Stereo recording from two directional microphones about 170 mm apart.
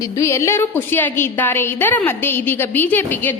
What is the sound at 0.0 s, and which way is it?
A woman's voice, 15° left (ahead or behind).